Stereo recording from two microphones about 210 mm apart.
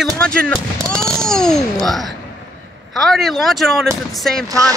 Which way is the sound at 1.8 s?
Centre (ahead or behind).